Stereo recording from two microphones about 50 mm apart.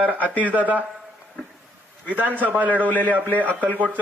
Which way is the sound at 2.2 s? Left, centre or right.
Right.